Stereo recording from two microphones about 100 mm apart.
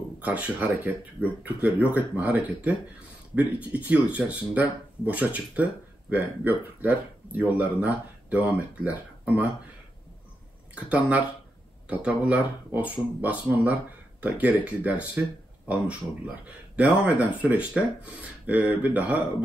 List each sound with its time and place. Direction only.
0.2 s speech: 15° right (ahead or behind)
10.7 s speech: 15° right (ahead or behind)
16.7 s speech: 15° right (ahead or behind)